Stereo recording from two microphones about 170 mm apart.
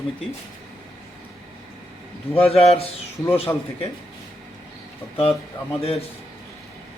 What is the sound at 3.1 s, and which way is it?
Speech, 10° left (ahead or behind).